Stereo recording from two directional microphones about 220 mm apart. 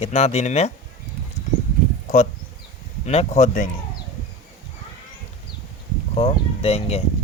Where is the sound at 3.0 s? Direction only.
30° left (ahead or behind).